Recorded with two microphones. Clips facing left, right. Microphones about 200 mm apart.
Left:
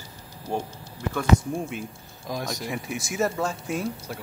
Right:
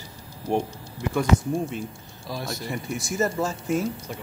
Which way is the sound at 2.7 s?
Centre (ahead or behind).